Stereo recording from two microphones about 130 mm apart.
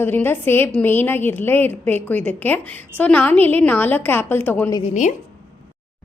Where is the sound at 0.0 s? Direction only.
15° left (ahead or behind).